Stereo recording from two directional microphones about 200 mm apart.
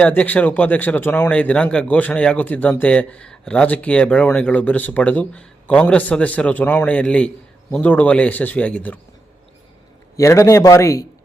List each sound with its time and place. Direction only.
0.0 s speech: 5° left (ahead or behind)
10.2 s speech: 15° left (ahead or behind)